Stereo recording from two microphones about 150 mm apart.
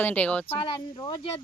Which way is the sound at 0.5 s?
30° left (ahead or behind).